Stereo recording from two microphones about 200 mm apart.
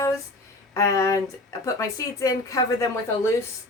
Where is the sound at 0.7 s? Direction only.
15° left (ahead or behind).